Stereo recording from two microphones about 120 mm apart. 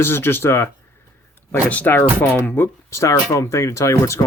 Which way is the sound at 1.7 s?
15° left (ahead or behind).